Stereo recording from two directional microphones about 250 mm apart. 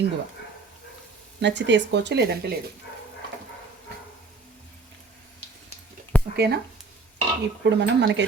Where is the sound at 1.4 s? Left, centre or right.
Right.